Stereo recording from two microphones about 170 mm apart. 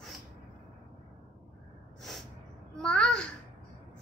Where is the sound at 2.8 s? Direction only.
5° left (ahead or behind).